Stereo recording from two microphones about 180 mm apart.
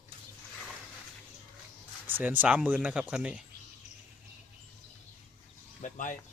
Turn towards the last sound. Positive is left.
turn(degrees=45)  # may be behind; listen again after turning